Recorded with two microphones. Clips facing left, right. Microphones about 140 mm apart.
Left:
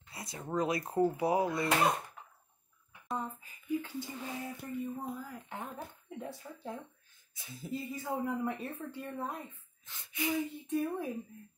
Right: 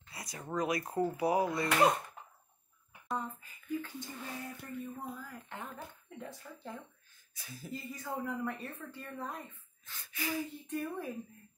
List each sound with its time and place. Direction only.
0.1 s a sound: 25° left (ahead or behind)
0.6 s speech: 25° left (ahead or behind)
3.2 s speech: 10° left (ahead or behind)
7.3 s speech: 25° left (ahead or behind)